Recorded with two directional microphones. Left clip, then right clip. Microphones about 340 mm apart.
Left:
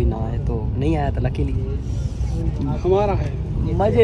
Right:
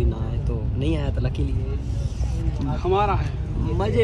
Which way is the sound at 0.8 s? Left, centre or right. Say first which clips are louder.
Left 5 dB; centre.